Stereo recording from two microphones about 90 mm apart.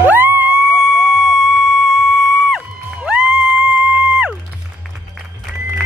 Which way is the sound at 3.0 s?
10° right (ahead or behind).